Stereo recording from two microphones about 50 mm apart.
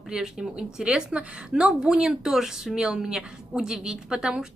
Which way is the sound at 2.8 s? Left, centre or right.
Centre.